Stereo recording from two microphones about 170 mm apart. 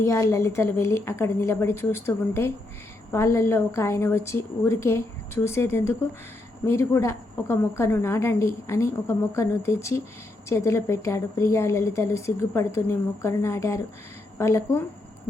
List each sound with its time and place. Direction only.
0.0 s a woman's voice: 20° left (ahead or behind)